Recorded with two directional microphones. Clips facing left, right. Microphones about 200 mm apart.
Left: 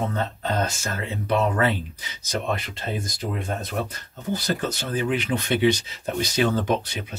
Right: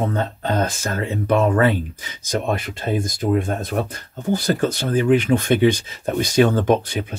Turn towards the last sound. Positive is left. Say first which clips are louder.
# right 6 dB
turn(degrees=-50)  # may be behind; listen again after turning